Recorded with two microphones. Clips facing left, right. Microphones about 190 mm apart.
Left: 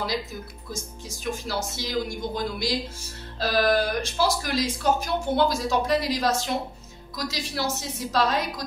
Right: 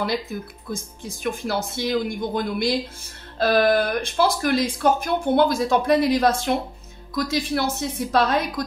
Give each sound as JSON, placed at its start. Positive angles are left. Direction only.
{"t": 0.0, "sound": "speech", "side_deg": -55}